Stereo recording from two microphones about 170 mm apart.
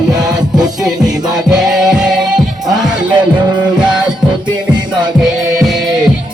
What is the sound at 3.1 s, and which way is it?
Music, 25° right (ahead or behind).